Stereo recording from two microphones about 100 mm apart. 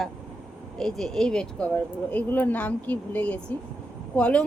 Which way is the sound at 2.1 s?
15° left (ahead or behind).